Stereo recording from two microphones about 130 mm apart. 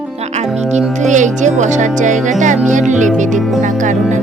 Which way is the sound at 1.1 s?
70° right (ahead or behind).